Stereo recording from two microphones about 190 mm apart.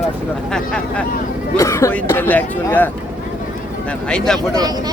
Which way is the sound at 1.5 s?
15° left (ahead or behind).